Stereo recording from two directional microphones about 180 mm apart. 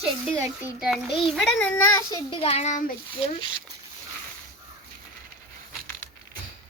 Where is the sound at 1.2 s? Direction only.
Centre (ahead or behind); by 2.8 s 40° left (ahead or behind).